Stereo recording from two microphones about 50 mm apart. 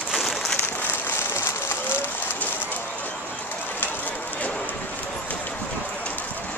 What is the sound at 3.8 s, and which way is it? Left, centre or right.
Run, left.